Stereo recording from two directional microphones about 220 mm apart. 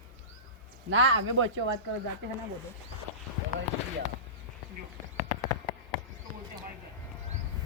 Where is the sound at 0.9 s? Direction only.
60° right (ahead or behind).